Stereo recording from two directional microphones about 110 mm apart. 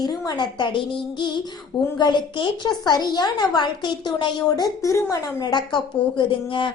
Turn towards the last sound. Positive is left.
turn(degrees=50)  # may be behind; listen again after turning